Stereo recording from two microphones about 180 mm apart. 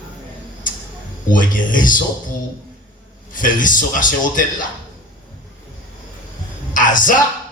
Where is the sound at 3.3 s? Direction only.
50° left (ahead or behind).